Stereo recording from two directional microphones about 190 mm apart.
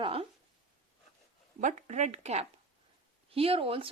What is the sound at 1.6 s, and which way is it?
A woman's voice, 40° right (ahead or behind).